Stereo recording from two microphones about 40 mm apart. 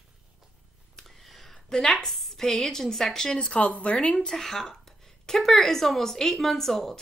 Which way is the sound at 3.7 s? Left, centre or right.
Left.